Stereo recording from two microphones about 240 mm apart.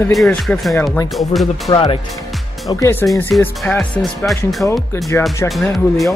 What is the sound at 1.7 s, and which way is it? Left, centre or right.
Speech, centre.